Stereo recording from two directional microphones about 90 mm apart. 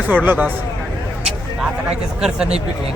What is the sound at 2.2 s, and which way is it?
Speech, 10° right (ahead or behind).